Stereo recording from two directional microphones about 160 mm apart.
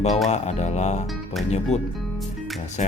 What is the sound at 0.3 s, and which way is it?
Music, 45° left (ahead or behind).